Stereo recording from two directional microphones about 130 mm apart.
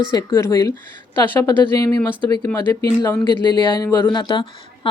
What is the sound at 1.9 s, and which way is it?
Speech, 15° left (ahead or behind).